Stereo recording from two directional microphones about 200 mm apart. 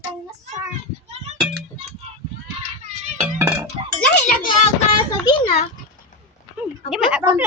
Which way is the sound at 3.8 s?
20° right (ahead or behind).